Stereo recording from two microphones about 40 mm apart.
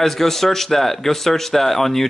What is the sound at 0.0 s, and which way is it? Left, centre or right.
Speech, centre.